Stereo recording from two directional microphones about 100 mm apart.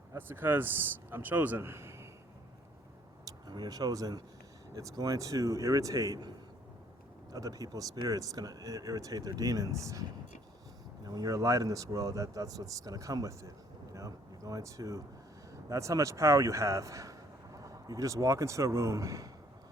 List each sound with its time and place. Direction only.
0.1 s a man's voice: 20° right (ahead or behind)
3.2 s speech: 45° right (ahead or behind)
7.3 s speech: 35° right (ahead or behind)
13.9 s a sound: 35° right (ahead or behind)
15.7 s speech: 30° right (ahead or behind)